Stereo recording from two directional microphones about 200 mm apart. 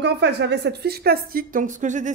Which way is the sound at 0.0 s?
60° right (ahead or behind).